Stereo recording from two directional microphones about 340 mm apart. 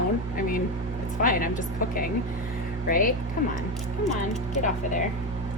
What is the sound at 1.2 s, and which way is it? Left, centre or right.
Speech, left.